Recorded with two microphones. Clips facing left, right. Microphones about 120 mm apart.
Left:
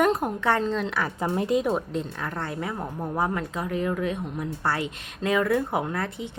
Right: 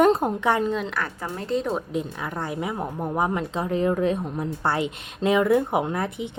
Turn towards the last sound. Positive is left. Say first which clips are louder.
# right 3 dB
turn(degrees=-20)  # may be behind; listen again after turning